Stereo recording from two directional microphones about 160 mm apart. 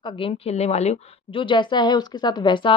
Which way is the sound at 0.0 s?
35° left (ahead or behind).